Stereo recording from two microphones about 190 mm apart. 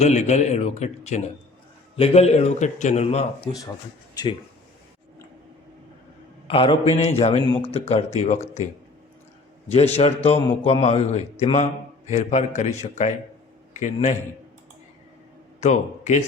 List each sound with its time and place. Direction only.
0.0 s a man's voice: 35° left (ahead or behind)
6.5 s a man's voice: 30° left (ahead or behind)
9.6 s a man's voice: 35° left (ahead or behind)
15.6 s speech: 40° left (ahead or behind)